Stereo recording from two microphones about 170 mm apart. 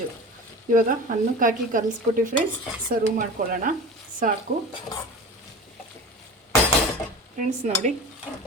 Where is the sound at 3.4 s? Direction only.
55° right (ahead or behind).